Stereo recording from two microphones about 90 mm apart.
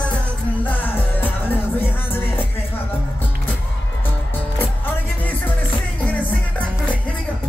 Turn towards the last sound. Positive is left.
turn(degrees=15)  # may be behind; listen again after turning